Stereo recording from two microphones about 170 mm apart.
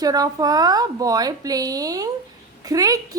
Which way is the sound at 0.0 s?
20° right (ahead or behind).